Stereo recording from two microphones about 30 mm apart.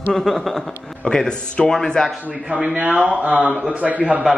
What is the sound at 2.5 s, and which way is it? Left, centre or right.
Speech, right.